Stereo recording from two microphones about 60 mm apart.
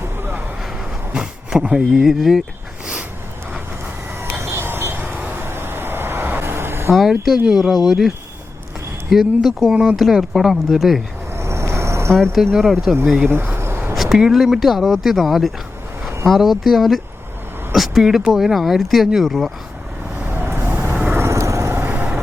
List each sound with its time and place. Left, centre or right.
0.2 s vehicle: right
1.1 s a sound: centre
1.9 s speech: centre
4.2 s vehicle: right
7.5 s speech: centre
11.3 s vehicle: right
12.1 s speech: centre
13.2 s a sound: right
13.9 s speech: centre
20.3 s vehicle: right
21.2 s vehicle: right
21.7 s vehicle: right